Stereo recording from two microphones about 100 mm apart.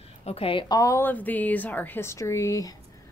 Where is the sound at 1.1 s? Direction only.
15° left (ahead or behind); by 2.7 s 35° left (ahead or behind).